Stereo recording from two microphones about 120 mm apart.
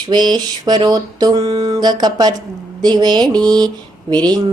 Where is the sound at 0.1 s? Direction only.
35° right (ahead or behind).